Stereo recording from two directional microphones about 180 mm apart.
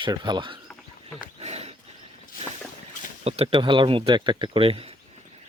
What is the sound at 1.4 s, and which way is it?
Wild animals, 35° right (ahead or behind).